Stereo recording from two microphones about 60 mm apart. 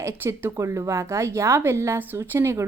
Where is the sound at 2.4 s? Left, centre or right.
Right.